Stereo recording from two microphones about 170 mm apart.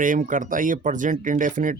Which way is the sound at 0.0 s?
50° right (ahead or behind).